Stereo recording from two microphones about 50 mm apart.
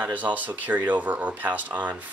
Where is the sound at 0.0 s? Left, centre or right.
Right.